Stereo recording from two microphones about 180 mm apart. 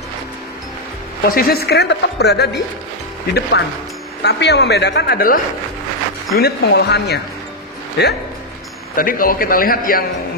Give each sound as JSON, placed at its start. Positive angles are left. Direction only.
{"t": 1.3, "sound": "speech", "side_deg": 60}
{"t": 4.2, "sound": "speech", "side_deg": 70}
{"t": 8.9, "sound": "a man's voice", "side_deg": 50}